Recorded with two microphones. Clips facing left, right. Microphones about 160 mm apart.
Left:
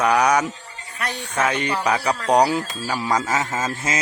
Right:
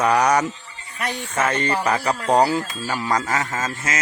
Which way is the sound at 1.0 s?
10° right (ahead or behind).